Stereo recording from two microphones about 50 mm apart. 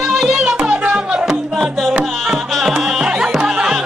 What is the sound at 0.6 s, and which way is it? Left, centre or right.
Music, right.